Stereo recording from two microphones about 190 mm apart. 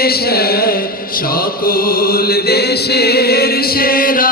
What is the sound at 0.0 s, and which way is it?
Mantra, 55° left (ahead or behind).